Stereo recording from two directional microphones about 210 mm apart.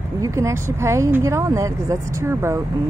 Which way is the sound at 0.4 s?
15° right (ahead or behind).